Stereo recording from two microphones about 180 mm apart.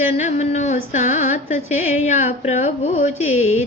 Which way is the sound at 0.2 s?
40° left (ahead or behind).